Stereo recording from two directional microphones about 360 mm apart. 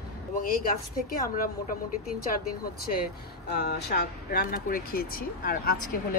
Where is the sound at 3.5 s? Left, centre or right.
Left.